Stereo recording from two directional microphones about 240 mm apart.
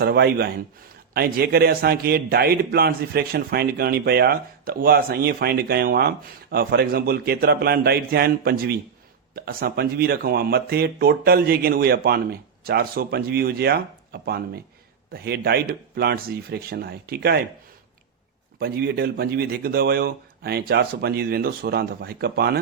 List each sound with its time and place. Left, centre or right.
0.0 s speech: right
18.6 s speech: right